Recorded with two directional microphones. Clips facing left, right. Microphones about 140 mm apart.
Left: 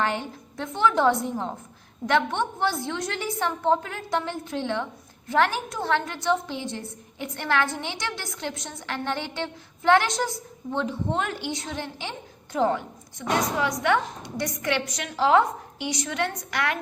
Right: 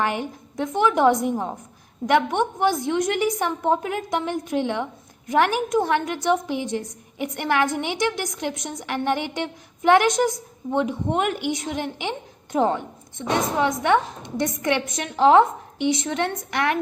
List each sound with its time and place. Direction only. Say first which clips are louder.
0.0 s a woman's voice: right 2 dB; 15° right (ahead or behind)